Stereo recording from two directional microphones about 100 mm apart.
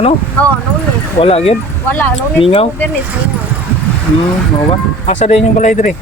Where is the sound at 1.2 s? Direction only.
80° left.